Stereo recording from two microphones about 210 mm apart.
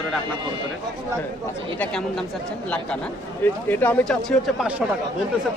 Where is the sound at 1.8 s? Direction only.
5° left (ahead or behind).